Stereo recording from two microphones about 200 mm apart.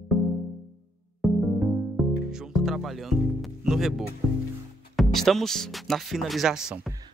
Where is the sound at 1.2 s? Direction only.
Centre (ahead or behind).